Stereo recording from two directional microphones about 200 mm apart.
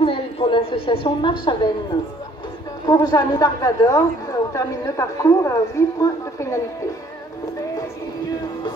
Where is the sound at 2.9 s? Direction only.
20° left (ahead or behind).